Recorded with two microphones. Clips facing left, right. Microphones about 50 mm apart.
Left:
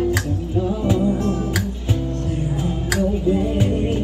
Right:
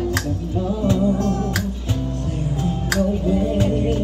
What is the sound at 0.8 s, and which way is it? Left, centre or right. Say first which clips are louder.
Music: right 3 dB; centre.